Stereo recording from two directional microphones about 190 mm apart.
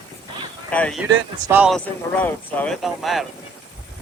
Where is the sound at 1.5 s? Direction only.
10° right (ahead or behind).